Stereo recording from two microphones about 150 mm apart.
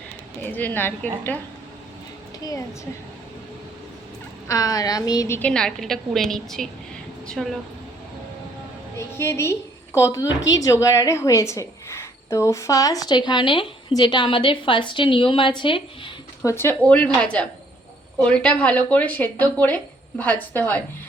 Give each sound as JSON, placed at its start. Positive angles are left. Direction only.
{"t": 0.4, "sound": "speech", "side_deg": 10}
{"t": 4.4, "sound": "a woman's voice", "side_deg": 25}
{"t": 5.4, "sound": "a woman's voice", "side_deg": 5}
{"t": 9.0, "sound": "a woman's voice", "side_deg": 15}
{"t": 16.4, "sound": "speech", "side_deg": 20}